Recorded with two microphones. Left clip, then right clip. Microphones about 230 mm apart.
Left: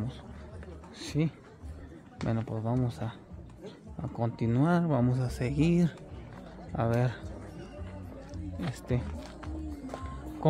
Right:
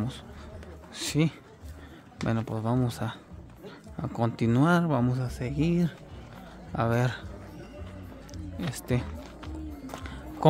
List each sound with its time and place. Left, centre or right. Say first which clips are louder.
0.9 s speech: right 5 dB; right; by 5.9 s centre
6.7 s speech: right 3 dB; centre
8.5 s speech: right 4 dB; centre
9.8 s music: right 1 dB; right